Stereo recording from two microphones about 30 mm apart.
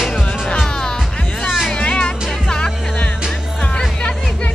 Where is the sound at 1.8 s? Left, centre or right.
Left.